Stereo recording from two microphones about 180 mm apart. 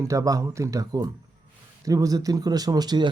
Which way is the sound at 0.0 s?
15° right (ahead or behind).